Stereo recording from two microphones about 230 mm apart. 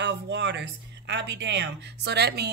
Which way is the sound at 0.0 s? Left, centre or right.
Right.